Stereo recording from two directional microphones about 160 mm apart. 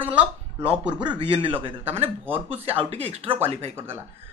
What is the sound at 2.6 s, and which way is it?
Speech, 40° right (ahead or behind).